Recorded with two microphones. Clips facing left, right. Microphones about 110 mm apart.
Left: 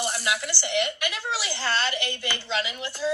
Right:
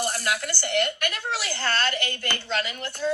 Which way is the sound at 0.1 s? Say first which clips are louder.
Right 1 dB; 55° right (ahead or behind).